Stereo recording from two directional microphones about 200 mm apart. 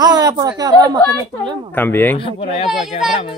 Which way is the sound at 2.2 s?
25° left (ahead or behind).